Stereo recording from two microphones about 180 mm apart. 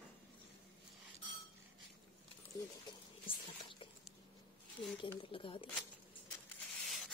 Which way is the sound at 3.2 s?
30° left (ahead or behind).